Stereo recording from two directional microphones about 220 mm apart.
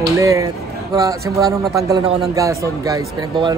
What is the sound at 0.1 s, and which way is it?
A man's voice, 15° right (ahead or behind).